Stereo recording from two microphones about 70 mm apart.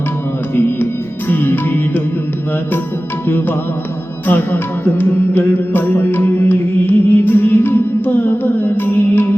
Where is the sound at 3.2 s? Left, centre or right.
Left.